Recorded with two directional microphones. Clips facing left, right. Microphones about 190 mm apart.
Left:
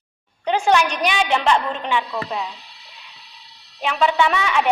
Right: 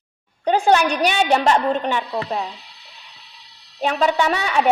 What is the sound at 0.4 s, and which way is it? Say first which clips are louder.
A woman's voice: right 2 dB; 35° right (ahead or behind).